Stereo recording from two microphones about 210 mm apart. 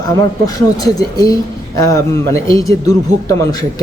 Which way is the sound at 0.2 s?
15° left (ahead or behind).